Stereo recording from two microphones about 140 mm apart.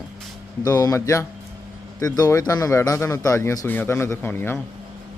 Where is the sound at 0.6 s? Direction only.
25° left (ahead or behind).